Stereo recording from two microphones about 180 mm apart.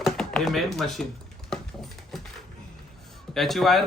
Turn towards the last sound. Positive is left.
turn(degrees=0)  # may be behind; listen again after turning